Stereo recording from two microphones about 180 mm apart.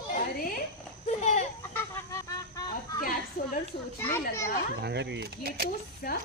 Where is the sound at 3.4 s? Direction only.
45° left (ahead or behind).